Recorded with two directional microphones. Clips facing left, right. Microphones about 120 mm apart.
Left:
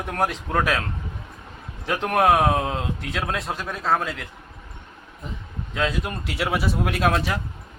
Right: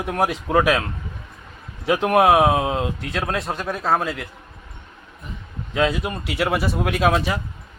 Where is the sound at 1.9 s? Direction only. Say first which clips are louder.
Right 4 dB; 5° right (ahead or behind).